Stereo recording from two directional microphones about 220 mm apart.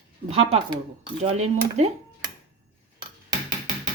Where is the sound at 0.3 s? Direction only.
25° right (ahead or behind).